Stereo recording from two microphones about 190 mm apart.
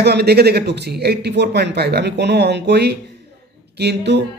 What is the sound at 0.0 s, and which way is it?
Speech, 60° right (ahead or behind).